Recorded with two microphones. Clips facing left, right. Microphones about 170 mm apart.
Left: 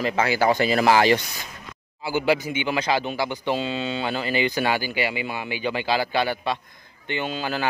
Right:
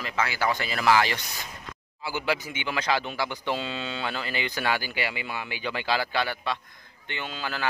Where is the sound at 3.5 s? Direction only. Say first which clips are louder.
Left 5 dB; 5° left (ahead or behind).